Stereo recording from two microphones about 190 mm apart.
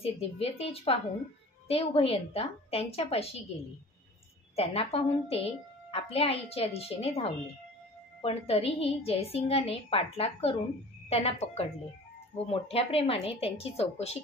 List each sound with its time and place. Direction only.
0.0 s a woman's voice: 30° left (ahead or behind)
4.6 s a woman's voice: 30° left (ahead or behind)